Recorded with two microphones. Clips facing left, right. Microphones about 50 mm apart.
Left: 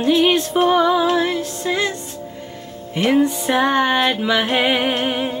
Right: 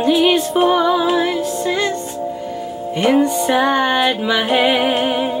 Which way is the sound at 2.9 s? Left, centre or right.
Centre.